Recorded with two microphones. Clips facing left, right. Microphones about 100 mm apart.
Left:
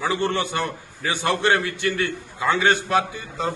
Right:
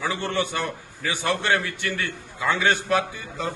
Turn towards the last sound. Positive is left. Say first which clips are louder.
# left 3 dB
turn(degrees=30)  # may be behind; listen again after turning